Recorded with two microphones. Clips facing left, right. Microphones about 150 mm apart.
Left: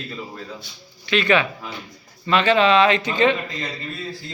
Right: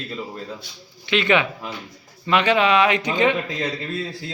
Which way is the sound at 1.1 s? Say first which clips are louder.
Even; 20° right (ahead or behind).